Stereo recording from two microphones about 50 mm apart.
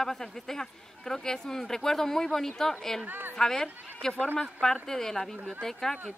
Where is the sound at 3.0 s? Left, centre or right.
Right.